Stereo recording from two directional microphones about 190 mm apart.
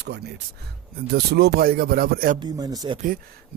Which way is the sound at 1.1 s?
60° right (ahead or behind).